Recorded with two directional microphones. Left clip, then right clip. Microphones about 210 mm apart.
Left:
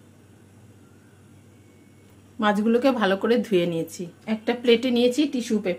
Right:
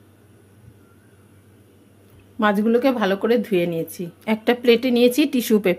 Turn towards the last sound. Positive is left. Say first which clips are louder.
# right 7 dB
turn(degrees=-35)  # may be behind; listen again after turning